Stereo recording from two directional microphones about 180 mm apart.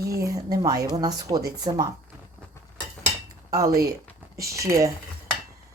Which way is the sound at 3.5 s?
20° right (ahead or behind).